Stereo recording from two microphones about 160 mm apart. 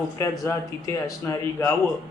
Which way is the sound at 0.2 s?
20° left (ahead or behind).